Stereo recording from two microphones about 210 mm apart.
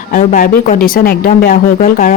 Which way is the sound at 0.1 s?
40° left (ahead or behind).